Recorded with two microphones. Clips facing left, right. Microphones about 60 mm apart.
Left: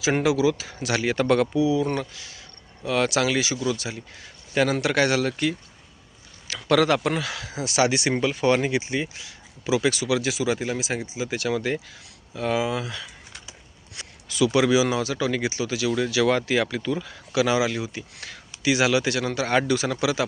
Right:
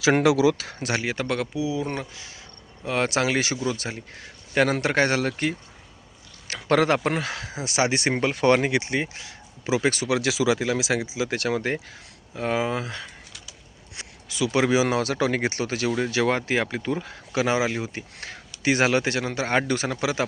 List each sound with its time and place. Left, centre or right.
0.0 s speech: right
1.0 s speech: centre
1.5 s speech: right
8.2 s speech: right
10.2 s speech: right
11.5 s speech: right
13.9 s speech: right
15.9 s speech: right